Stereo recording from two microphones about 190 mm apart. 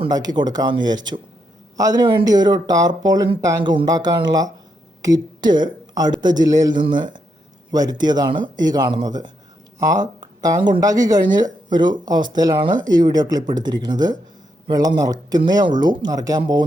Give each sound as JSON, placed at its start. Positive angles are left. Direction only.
{"t": 0.0, "sound": "speech", "side_deg": -20}